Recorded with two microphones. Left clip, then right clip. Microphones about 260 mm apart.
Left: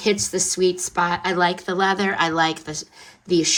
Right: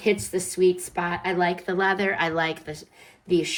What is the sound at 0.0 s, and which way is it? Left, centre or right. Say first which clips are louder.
Speech: left 3 dB; centre.